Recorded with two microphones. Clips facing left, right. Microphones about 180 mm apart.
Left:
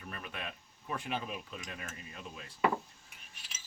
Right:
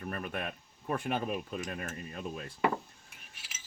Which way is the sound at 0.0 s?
50° right (ahead or behind).